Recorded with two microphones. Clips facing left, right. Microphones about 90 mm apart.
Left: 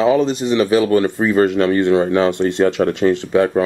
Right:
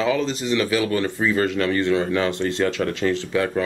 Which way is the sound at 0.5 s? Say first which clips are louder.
Left 7 dB; 25° left (ahead or behind).